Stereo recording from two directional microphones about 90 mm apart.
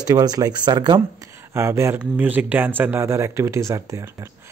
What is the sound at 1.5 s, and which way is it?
Speech, 30° right (ahead or behind).